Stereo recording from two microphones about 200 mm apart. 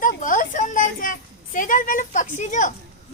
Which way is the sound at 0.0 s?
40° left (ahead or behind).